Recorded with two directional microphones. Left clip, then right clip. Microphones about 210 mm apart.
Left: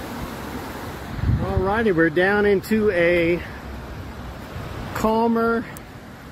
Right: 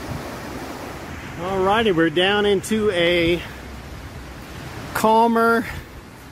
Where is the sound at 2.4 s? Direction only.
25° right (ahead or behind).